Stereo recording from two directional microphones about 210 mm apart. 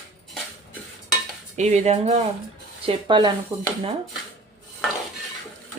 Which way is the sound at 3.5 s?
10° right (ahead or behind).